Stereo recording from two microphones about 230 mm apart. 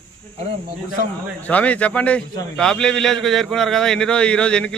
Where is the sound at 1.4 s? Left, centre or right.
Centre.